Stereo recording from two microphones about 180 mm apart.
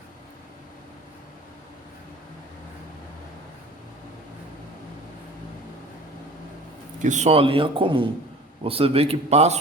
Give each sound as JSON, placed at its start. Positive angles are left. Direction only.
{"t": 7.0, "sound": "a man's voice", "side_deg": -40}